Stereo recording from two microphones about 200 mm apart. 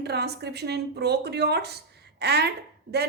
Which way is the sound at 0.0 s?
55° right (ahead or behind).